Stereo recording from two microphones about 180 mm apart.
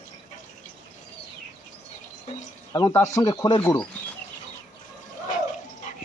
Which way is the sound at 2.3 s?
40° left (ahead or behind).